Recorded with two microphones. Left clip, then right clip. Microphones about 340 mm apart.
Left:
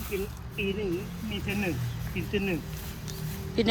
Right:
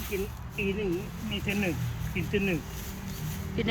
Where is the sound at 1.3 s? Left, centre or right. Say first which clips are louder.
Right 1 dB; centre.